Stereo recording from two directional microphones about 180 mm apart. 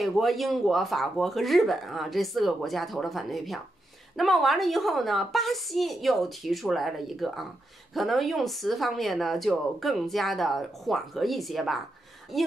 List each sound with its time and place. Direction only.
0.0 s speech: centre (ahead or behind)